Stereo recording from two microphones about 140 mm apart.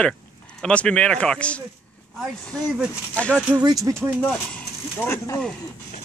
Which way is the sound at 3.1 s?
10° left (ahead or behind).